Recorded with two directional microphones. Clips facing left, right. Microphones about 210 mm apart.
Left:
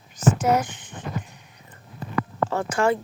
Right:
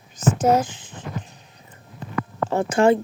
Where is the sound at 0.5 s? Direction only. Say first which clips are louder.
Right 3 dB; 25° right (ahead or behind).